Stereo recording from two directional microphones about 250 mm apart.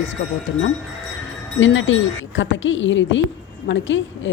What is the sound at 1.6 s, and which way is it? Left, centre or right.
Speech, left.